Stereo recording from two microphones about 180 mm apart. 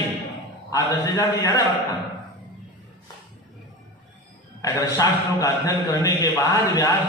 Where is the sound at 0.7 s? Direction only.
20° left (ahead or behind).